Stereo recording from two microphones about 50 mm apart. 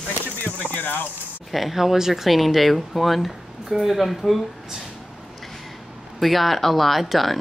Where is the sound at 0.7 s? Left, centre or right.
Left.